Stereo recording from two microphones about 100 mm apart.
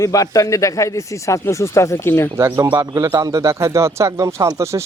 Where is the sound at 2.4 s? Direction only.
25° right (ahead or behind).